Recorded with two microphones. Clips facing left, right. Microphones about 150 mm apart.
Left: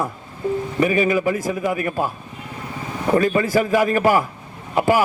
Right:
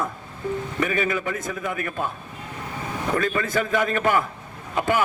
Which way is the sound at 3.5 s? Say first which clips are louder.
Left 4 dB; 10° left (ahead or behind).